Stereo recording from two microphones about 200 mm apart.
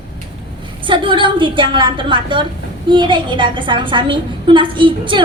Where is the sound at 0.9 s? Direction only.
25° right (ahead or behind).